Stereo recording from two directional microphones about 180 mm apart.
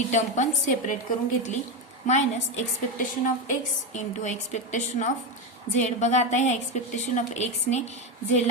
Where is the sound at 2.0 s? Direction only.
40° left (ahead or behind).